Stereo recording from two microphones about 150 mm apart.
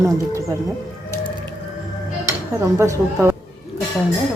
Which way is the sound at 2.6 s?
20° right (ahead or behind).